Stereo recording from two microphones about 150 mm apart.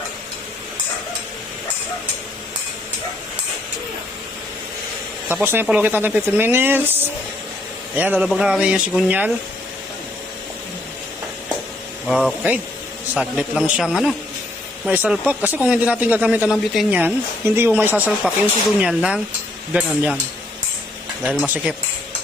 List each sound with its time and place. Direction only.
5.3 s a woman's voice: 15° right (ahead or behind)
7.9 s a woman's voice: 10° right (ahead or behind)
12.0 s a man's voice: centre (ahead or behind)
21.2 s a woman's voice: 10° right (ahead or behind)